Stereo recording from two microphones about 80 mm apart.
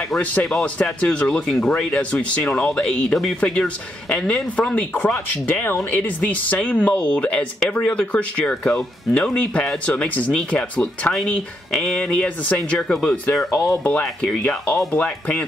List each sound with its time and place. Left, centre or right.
0.2 s speech: centre
14.9 s speech: centre